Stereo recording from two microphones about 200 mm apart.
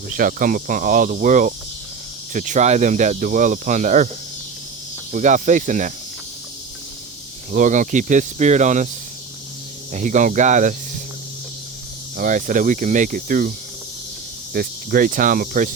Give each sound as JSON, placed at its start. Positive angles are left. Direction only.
{"t": 0.1, "sound": "speech", "side_deg": -45}
{"t": 5.1, "sound": "speech", "side_deg": -40}
{"t": 7.5, "sound": "speech", "side_deg": -40}
{"t": 9.9, "sound": "speech", "side_deg": -40}
{"t": 12.1, "sound": "speech", "side_deg": -45}
{"t": 14.5, "sound": "speech", "side_deg": -50}